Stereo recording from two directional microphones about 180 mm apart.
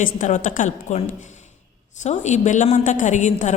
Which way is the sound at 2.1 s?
40° left (ahead or behind).